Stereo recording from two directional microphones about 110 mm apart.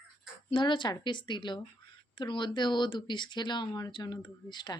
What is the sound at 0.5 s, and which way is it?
A woman's voice, 45° left (ahead or behind).